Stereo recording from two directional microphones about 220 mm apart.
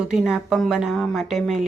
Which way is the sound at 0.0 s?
5° right (ahead or behind).